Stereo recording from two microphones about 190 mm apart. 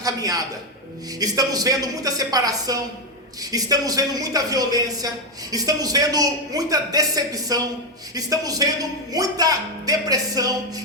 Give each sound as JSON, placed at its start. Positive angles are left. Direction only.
{"t": 0.0, "sound": "a man's voice", "side_deg": -20}